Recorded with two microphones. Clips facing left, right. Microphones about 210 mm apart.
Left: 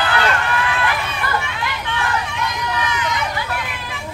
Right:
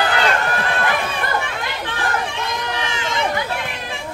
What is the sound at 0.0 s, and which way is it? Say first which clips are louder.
Run: right 1 dB; 40° right (ahead or behind).